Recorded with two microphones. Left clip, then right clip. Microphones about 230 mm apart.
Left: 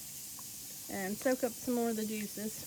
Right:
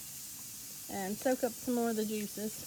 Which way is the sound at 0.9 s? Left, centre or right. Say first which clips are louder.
Even; centre.